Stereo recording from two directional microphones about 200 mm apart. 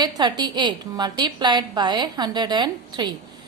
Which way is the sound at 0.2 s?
20° right (ahead or behind).